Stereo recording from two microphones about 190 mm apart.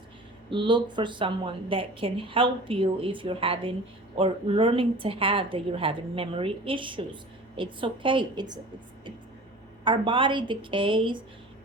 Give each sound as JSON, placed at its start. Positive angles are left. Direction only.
{"t": 0.5, "sound": "a woman's voice", "side_deg": -25}
{"t": 9.8, "sound": "a woman's voice", "side_deg": -25}